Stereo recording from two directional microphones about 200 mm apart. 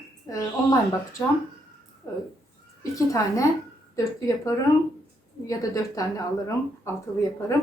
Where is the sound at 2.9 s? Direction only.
15° left (ahead or behind).